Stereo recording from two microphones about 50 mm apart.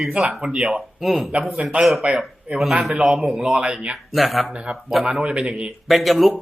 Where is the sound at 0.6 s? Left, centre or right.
Centre.